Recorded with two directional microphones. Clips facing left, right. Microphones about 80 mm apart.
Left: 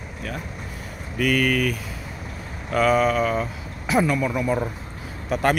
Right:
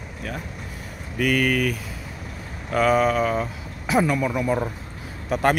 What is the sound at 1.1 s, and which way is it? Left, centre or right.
A man's voice, centre.